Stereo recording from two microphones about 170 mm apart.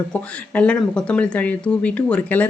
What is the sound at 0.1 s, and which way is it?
Speech, 5° left (ahead or behind).